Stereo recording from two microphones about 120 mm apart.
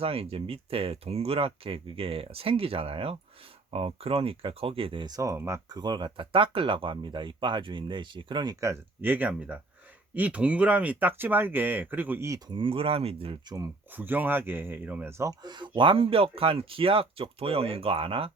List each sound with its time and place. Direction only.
0.0 s speech: 50° right (ahead or behind); by 5.7 s 25° right (ahead or behind)
5.7 s speech: 35° right (ahead or behind)
8.6 s speech: 20° right (ahead or behind)
12.5 s speech: 45° right (ahead or behind)
13.9 s speech: 15° right (ahead or behind)
15.2 s speech: 35° right (ahead or behind)